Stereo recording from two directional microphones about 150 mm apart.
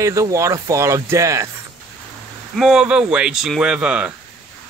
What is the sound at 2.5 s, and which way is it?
Speech, 5° right (ahead or behind).